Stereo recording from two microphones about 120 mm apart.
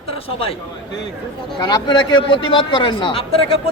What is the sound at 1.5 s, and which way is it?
A man's voice, 40° left (ahead or behind).